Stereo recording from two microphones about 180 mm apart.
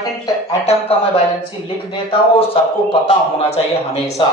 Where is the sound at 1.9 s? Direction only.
25° left (ahead or behind).